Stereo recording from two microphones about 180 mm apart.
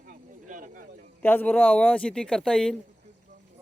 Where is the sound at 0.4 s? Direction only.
50° right (ahead or behind).